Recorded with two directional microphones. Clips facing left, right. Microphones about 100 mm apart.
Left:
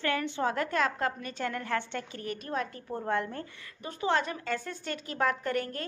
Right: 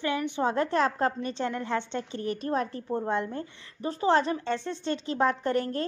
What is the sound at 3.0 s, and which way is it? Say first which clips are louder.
Speech: left 2 dB; 20° right (ahead or behind).